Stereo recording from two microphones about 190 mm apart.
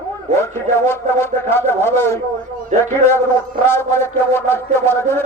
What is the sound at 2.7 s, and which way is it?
Speech, 40° right (ahead or behind).